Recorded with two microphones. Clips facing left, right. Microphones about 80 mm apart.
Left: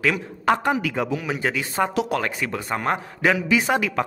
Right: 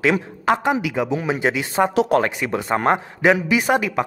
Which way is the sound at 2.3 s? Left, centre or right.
Centre.